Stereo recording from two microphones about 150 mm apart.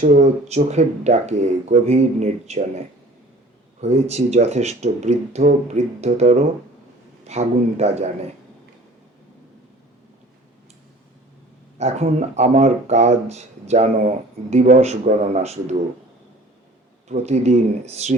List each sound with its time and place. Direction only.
0.0 s speech: 50° right (ahead or behind)
11.8 s speech: 50° right (ahead or behind)
17.1 s speech: 50° right (ahead or behind)